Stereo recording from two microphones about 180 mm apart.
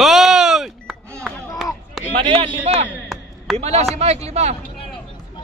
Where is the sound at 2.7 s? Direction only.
35° right (ahead or behind).